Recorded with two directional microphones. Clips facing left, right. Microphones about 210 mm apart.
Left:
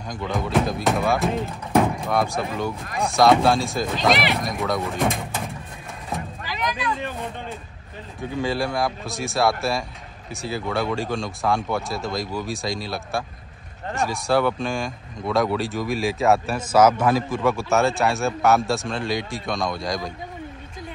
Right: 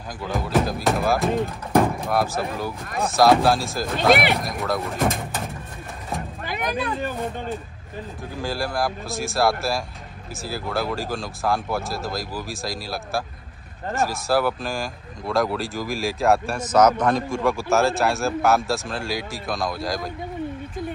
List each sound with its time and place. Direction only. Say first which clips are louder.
0.2 s speech: even; centre (ahead or behind)
6.4 s a sound: right 2 dB; 55° right (ahead or behind)
8.2 s speech: left 4 dB; centre (ahead or behind)